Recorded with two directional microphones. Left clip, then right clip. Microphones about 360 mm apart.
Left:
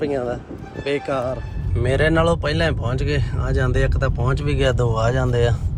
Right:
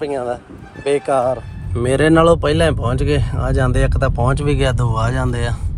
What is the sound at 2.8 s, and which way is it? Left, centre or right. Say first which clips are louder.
Speech: right 5 dB; centre.